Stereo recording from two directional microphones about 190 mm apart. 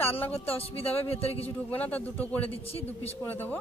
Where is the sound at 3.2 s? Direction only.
10° left (ahead or behind).